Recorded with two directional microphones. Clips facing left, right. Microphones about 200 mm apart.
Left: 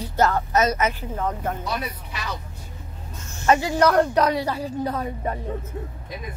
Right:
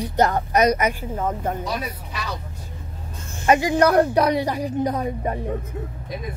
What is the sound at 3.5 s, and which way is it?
A woman's voice, 15° right (ahead or behind).